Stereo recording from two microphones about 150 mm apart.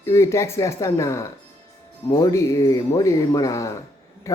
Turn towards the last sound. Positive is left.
turn(degrees=20)  # may be behind; listen again after turning